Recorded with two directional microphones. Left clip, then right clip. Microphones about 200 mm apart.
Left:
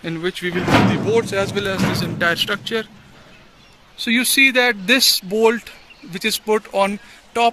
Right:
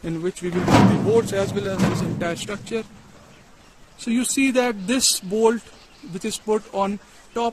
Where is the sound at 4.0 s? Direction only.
5° right (ahead or behind).